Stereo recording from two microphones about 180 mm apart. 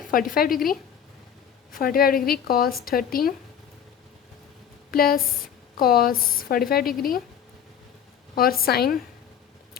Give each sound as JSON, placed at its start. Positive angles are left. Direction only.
{"t": 0.1, "sound": "a woman's voice", "side_deg": 50}
{"t": 4.9, "sound": "a woman's voice", "side_deg": 55}
{"t": 8.4, "sound": "a woman's voice", "side_deg": 55}